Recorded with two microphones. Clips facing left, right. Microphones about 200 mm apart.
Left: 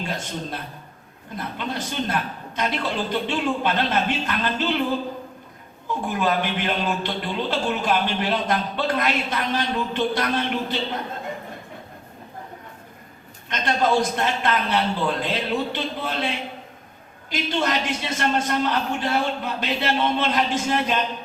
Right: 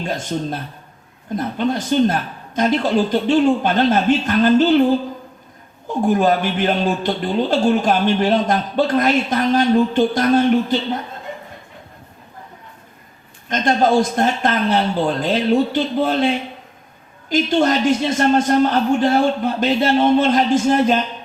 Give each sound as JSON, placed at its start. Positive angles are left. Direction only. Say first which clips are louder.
{"t": 1.4, "sound": "speech", "louder": "right 9 dB", "side_deg": -40}
{"t": 5.9, "sound": "speech", "louder": "right 8 dB", "side_deg": -45}
{"t": 13.5, "sound": "speech", "louder": "right 6 dB", "side_deg": -45}
{"t": 17.2, "sound": "speech", "louder": "right 8 dB", "side_deg": -45}